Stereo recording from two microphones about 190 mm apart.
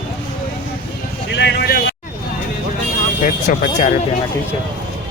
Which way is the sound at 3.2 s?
40° left (ahead or behind).